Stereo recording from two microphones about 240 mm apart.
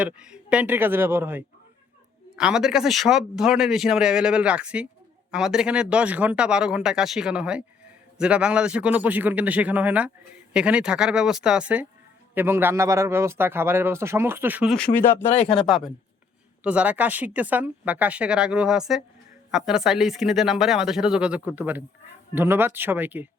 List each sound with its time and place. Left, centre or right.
0.0 s speech: centre
15.2 s speech: left
15.6 s speech: centre